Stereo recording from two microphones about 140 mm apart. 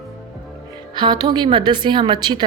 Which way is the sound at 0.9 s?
30° right (ahead or behind).